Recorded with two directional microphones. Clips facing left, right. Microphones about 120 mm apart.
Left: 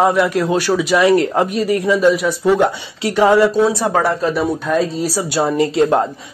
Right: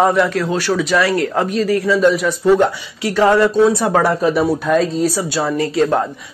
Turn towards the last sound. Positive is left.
turn(degrees=20)  # may be behind; listen again after turning